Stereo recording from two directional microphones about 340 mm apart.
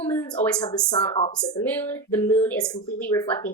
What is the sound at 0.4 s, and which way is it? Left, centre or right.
A woman's voice, centre.